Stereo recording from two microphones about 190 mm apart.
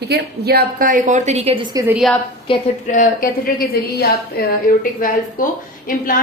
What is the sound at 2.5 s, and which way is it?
Speech, 25° left (ahead or behind).